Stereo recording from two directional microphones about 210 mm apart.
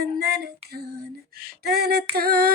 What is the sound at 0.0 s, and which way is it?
Female singing, 50° right (ahead or behind).